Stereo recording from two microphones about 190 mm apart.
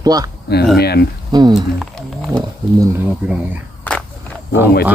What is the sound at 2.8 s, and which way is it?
Speech, 10° right (ahead or behind).